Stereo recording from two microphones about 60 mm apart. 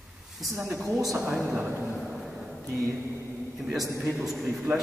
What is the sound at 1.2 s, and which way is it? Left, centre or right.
Speech, centre.